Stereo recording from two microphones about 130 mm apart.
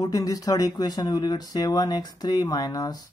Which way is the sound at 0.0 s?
25° left (ahead or behind).